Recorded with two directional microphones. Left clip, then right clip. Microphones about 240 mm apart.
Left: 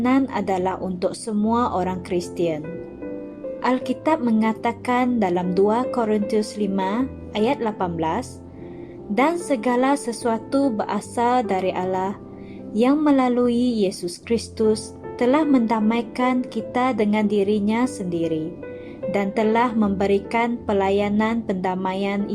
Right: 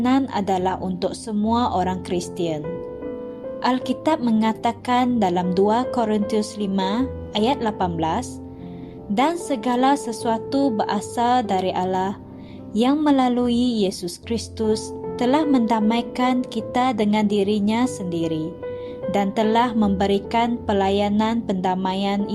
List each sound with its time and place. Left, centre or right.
0.0 s a woman's voice: centre
3.6 s a woman's voice: centre